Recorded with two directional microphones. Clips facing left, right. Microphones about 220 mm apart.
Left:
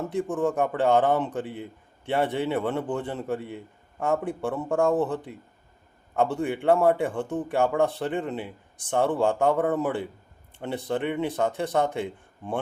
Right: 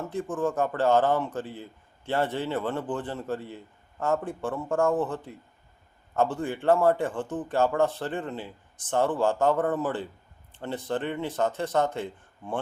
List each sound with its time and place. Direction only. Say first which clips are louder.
0.0 s speech: left 3 dB; 15° left (ahead or behind)